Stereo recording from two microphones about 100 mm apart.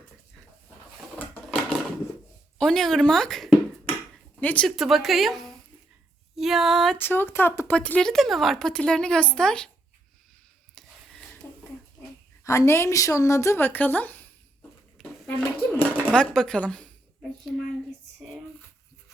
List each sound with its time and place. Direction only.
1.2 s a sound: 15° left (ahead or behind)
2.6 s a sound: 5° left (ahead or behind)
4.4 s speech: 15° left (ahead or behind)
4.6 s speech: centre (ahead or behind)
7.0 s speech: 20° left (ahead or behind)
7.7 s speech: 10° left (ahead or behind)
10.8 s dishes: 5° left (ahead or behind)
12.5 s speech: 30° left (ahead or behind)
15.3 s speech: 15° left (ahead or behind)
17.5 s speech: centre (ahead or behind)